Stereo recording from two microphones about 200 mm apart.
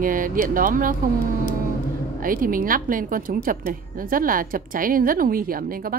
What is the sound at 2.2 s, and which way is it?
A woman's voice, 45° right (ahead or behind).